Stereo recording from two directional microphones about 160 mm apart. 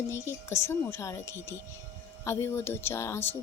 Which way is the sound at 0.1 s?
15° left (ahead or behind).